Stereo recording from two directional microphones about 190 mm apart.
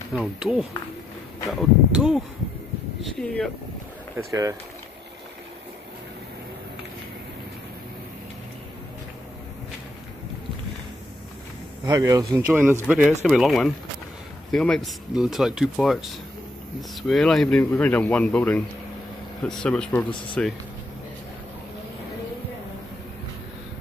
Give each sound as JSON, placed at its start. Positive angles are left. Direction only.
{"t": 0.1, "sound": "speech", "side_deg": 0}
{"t": 4.3, "sound": "speech", "side_deg": -20}
{"t": 11.8, "sound": "speech", "side_deg": -20}